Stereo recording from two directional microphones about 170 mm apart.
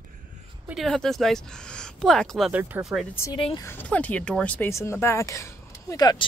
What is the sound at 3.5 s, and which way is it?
Speech, 15° left (ahead or behind).